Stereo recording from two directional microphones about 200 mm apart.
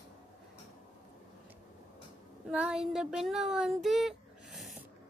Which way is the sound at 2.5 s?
5° right (ahead or behind).